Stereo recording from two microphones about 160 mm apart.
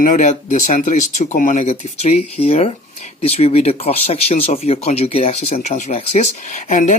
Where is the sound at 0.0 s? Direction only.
50° left (ahead or behind).